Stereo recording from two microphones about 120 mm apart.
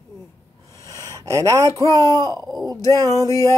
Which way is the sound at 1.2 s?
25° right (ahead or behind).